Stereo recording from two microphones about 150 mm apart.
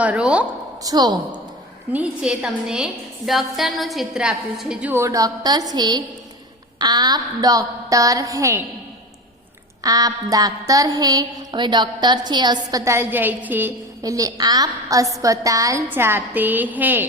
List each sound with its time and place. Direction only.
0.0 s a woman's voice: 10° right (ahead or behind)
0.8 s music: 25° right (ahead or behind)
1.9 s a woman's voice: 5° right (ahead or behind); by 6.0 s 25° right (ahead or behind)
6.7 s music: 25° right (ahead or behind)
9.8 s music: 25° right (ahead or behind)
14.0 s music: 25° right (ahead or behind)